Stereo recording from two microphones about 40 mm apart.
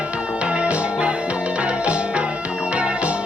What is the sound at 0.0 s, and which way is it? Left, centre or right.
Music, right.